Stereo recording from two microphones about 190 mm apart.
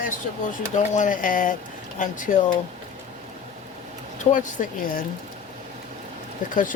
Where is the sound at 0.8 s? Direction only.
40° left (ahead or behind).